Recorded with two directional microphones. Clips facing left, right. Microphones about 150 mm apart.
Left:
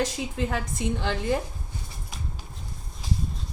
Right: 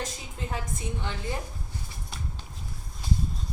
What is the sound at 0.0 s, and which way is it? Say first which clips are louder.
A woman's voice: left 9 dB; 85° left.